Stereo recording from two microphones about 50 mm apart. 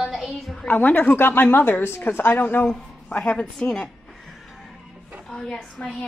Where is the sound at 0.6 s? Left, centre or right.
Left.